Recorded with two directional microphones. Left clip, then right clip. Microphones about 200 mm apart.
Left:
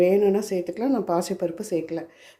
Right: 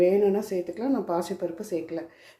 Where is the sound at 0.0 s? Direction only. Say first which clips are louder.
Left 2 dB; 25° left (ahead or behind).